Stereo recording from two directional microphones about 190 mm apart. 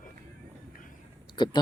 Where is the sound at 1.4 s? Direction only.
25° left (ahead or behind).